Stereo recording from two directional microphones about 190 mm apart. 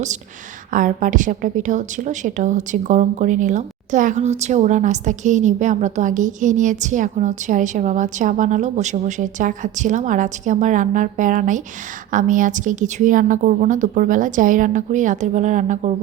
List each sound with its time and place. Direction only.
0.7 s a woman's voice: 45° right (ahead or behind)